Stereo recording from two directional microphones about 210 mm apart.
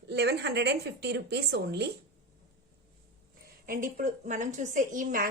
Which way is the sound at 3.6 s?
40° right (ahead or behind).